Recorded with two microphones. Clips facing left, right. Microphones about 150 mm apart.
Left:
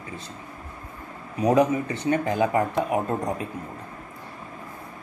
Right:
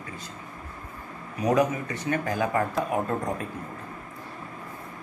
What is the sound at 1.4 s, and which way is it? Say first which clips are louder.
Speech: left 3 dB; 30° left (ahead or behind).